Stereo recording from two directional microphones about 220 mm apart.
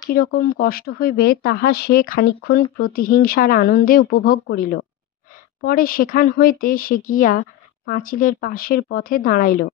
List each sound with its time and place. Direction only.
0.1 s speech: 45° left (ahead or behind)